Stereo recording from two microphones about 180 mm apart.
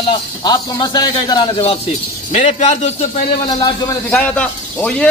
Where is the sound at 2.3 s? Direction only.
40° left (ahead or behind).